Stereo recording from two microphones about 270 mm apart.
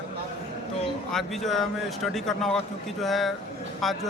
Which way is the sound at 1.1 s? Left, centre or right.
Centre.